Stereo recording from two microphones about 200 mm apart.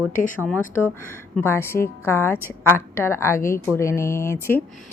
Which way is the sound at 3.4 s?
45° left (ahead or behind).